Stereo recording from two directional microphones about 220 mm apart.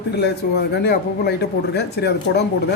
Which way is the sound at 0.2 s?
50° left (ahead or behind).